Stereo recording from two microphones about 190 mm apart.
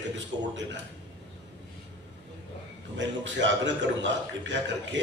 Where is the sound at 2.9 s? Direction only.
70° right (ahead or behind).